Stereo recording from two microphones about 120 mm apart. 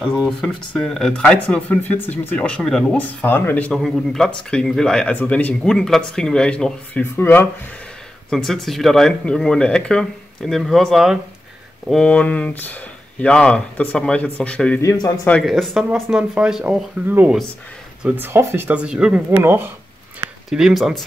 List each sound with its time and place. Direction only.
0.3 s speech: 5° left (ahead or behind)
8.3 s speech: 5° left (ahead or behind)
14.8 s speech: 25° left (ahead or behind)
15.4 s speech: centre (ahead or behind)
18.0 s speech: 15° right (ahead or behind)
19.4 s speech: 20° right (ahead or behind)
20.4 s speech: 5° right (ahead or behind)